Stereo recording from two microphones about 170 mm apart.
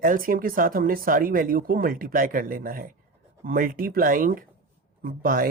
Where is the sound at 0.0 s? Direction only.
55° right (ahead or behind).